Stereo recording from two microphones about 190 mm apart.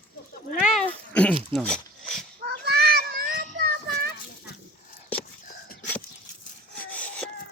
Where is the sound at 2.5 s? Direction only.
60° right (ahead or behind).